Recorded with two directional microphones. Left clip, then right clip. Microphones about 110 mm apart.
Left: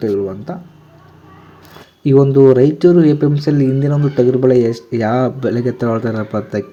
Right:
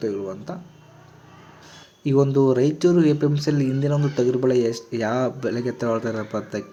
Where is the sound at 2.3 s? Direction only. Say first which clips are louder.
Left 10 dB; 30° left (ahead or behind).